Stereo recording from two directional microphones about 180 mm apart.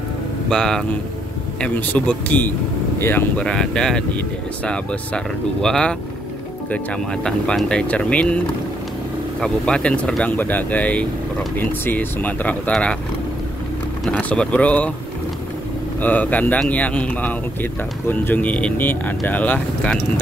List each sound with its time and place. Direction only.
0.5 s speech: 5° left (ahead or behind)
7.2 s speech: 5° left (ahead or behind)
9.4 s speech: 5° left (ahead or behind)
14.0 s speech: 5° left (ahead or behind)
16.0 s speech: 10° left (ahead or behind)